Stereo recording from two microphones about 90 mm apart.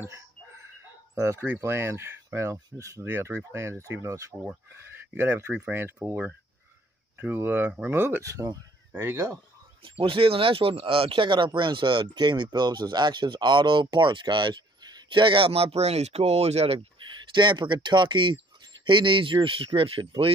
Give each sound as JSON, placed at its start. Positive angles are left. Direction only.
{"t": 1.1, "sound": "speech", "side_deg": -30}
{"t": 9.8, "sound": "speech", "side_deg": -80}
{"t": 17.3, "sound": "speech", "side_deg": -60}